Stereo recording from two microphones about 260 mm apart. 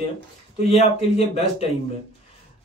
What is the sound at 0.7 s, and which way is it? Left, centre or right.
Speech, left.